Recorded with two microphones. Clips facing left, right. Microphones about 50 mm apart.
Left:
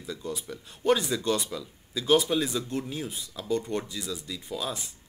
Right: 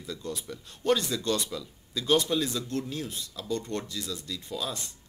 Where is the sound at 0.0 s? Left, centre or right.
Centre.